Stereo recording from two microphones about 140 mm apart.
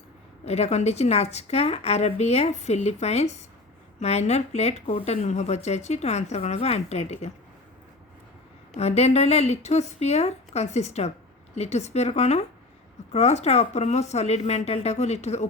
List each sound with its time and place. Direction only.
0.4 s speech: 50° left (ahead or behind)
8.7 s speech: 50° left (ahead or behind)